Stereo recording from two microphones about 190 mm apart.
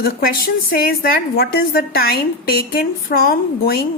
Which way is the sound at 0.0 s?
50° left (ahead or behind).